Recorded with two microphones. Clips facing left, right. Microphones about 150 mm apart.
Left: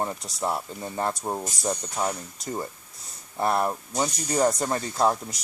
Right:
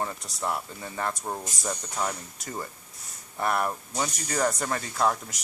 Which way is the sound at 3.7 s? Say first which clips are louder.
Left 3 dB; 15° left (ahead or behind).